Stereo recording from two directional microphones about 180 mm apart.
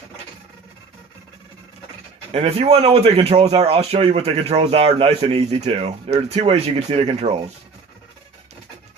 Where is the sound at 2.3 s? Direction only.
35° right (ahead or behind).